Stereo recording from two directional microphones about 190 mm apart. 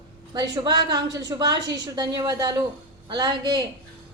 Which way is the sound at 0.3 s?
20° right (ahead or behind).